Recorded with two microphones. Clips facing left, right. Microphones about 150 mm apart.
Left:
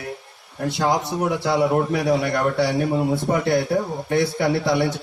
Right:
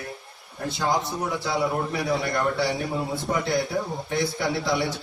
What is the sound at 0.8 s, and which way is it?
A man's voice, 65° left (ahead or behind).